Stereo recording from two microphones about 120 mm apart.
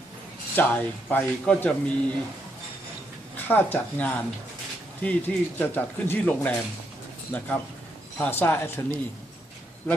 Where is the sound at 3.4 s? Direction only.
15° left (ahead or behind).